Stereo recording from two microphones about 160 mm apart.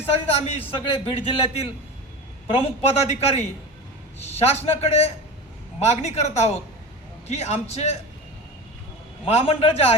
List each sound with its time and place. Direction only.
0.0 s a man's voice: 40° left (ahead or behind)
9.2 s a man's voice: 40° left (ahead or behind)